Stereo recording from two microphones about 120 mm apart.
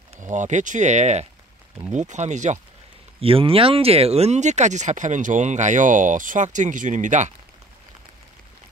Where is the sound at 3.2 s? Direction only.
50° right (ahead or behind); by 7.3 s 90° right.